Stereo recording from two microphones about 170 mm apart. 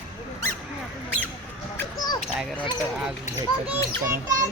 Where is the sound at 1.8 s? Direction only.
20° left (ahead or behind).